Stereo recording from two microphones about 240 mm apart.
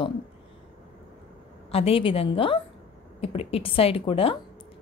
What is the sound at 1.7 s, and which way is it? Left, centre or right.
Speech, left.